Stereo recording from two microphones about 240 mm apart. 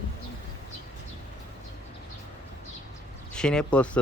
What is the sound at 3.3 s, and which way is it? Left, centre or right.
Speech, centre.